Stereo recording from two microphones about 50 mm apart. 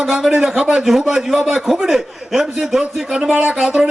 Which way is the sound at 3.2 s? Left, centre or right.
Right.